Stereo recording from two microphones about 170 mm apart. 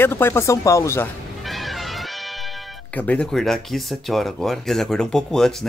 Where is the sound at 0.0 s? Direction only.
15° left (ahead or behind).